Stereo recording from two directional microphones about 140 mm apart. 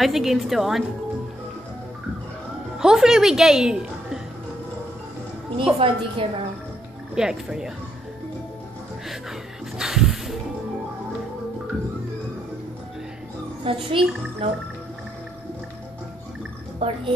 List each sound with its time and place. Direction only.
0.0 s a woman's voice: centre (ahead or behind)
2.8 s a woman's voice: 5° right (ahead or behind)
5.8 s a child's voice: 40° right (ahead or behind)
7.2 s a woman's voice: 5° right (ahead or behind)
9.8 s a sound: 5° right (ahead or behind)
13.7 s a child's voice: 40° right (ahead or behind)
16.8 s a child's voice: 40° right (ahead or behind)